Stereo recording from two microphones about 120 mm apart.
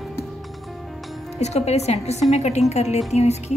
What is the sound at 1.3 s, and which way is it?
A woman's voice, 65° left (ahead or behind).